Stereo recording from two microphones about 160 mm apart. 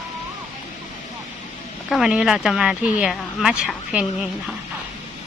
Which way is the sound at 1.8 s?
Centre (ahead or behind).